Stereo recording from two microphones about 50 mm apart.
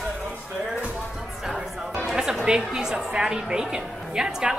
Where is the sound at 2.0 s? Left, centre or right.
Centre.